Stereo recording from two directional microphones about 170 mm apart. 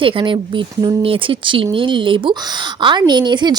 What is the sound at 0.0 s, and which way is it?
Speech, 30° right (ahead or behind).